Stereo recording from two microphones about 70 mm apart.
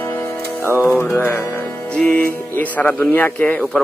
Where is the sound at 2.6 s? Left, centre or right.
Left.